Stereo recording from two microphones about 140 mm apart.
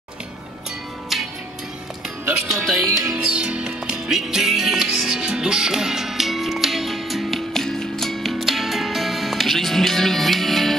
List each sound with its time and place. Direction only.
1.1 s music: centre (ahead or behind)
2.4 s speech: centre (ahead or behind)
3.1 s music: 5° right (ahead or behind)